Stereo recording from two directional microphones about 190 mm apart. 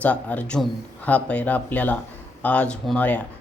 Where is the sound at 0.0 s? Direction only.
5° left (ahead or behind).